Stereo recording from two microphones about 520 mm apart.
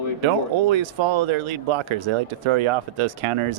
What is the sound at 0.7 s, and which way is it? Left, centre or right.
Speech, right.